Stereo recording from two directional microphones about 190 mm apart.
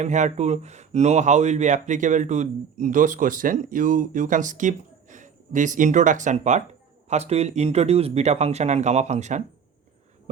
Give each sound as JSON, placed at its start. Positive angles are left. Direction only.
{"t": 0.0, "sound": "speech", "side_deg": -40}